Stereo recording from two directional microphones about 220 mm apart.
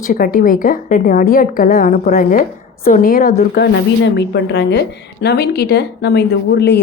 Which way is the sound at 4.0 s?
50° left (ahead or behind).